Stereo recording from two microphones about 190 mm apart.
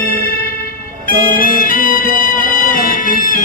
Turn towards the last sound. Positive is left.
turn(degrees=45)  # may be behind; listen again after turning